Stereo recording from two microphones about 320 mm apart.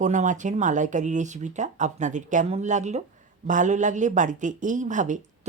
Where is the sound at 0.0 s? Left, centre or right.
Right.